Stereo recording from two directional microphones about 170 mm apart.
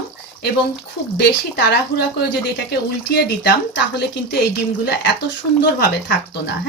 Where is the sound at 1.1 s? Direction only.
80° left.